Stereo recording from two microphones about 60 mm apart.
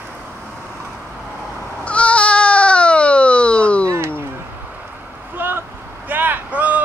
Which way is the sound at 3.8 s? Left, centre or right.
Right.